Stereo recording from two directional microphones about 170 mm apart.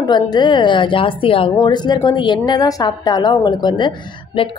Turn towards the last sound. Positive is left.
turn(degrees=25)  # may be behind; listen again after turning